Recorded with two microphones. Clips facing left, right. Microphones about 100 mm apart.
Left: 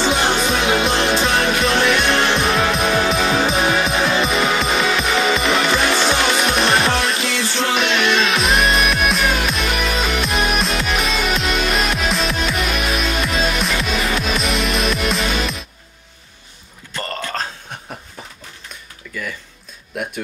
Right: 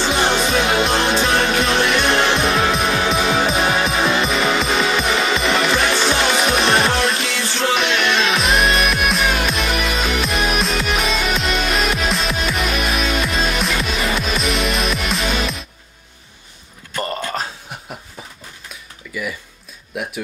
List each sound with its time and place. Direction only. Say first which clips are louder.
0.1 s music: right 1 dB; centre (ahead or behind)
16.9 s a sound: right 2 dB; 15° right (ahead or behind)
19.1 s music: right 2 dB; 5° right (ahead or behind)